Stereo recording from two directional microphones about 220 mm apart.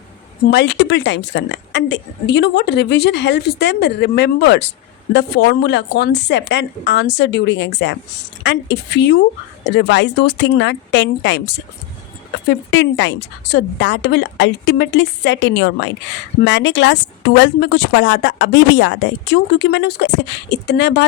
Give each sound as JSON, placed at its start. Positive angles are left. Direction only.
{"t": 0.5, "sound": "a woman's voice", "side_deg": 50}